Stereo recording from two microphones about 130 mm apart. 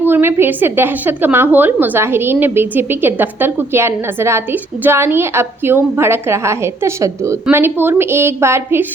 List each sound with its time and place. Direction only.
0.0 s a woman's voice: 15° right (ahead or behind)